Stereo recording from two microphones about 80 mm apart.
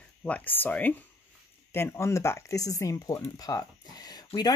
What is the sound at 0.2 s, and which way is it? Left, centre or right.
Speech, left.